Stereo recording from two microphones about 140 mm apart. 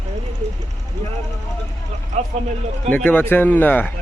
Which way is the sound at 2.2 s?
55° right (ahead or behind).